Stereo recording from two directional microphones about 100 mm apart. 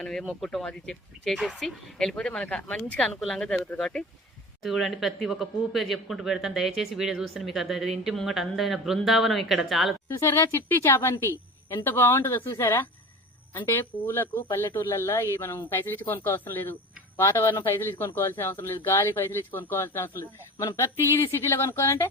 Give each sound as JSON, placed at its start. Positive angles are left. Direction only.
{"t": 0.0, "sound": "speech", "side_deg": 5}
{"t": 10.1, "sound": "a woman's voice", "side_deg": 25}